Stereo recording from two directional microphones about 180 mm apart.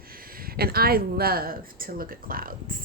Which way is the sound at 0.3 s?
60° right (ahead or behind).